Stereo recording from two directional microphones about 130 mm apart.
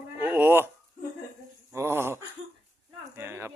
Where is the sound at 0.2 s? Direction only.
15° right (ahead or behind).